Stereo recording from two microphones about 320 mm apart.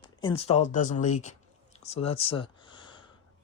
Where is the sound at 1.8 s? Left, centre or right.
Centre.